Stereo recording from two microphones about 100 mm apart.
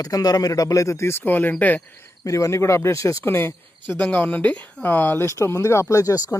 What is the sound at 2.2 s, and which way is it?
Speech, 30° left (ahead or behind).